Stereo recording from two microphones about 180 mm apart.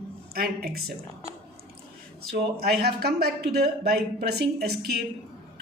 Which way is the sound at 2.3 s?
60° right (ahead or behind).